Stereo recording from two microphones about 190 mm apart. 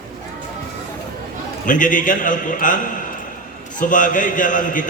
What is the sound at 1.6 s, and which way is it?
A man's voice, 45° left (ahead or behind).